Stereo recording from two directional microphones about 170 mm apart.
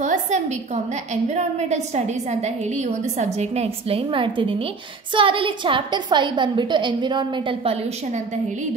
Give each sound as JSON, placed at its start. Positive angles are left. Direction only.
{"t": 0.0, "sound": "a sound", "side_deg": -45}
{"t": 1.3, "sound": "a woman's voice", "side_deg": -40}
{"t": 3.2, "sound": "a woman's voice", "side_deg": -40}